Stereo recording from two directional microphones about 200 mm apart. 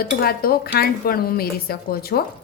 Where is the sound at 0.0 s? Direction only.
50° left (ahead or behind).